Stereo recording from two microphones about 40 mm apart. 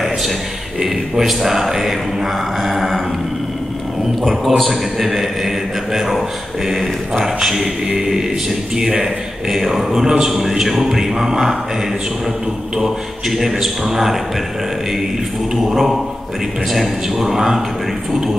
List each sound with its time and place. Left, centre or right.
0.8 s a man's voice: centre
4.3 s a man's voice: centre
6.7 s a man's voice: centre
12.8 s a man's voice: centre
15.5 s a man's voice: centre